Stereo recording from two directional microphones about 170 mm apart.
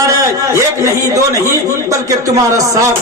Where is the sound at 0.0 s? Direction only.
20° right (ahead or behind).